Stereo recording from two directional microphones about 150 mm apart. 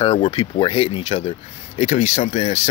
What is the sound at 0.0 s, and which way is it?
Speech, 35° left (ahead or behind).